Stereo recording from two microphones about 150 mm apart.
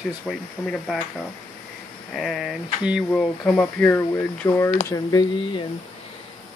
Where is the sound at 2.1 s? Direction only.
Centre (ahead or behind); by 5.2 s 20° left (ahead or behind).